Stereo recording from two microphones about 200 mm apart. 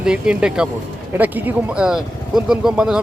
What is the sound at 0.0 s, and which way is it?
Speech, 5° right (ahead or behind).